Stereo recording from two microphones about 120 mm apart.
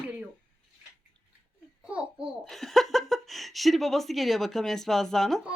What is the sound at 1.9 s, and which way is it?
Babbling, 10° right (ahead or behind).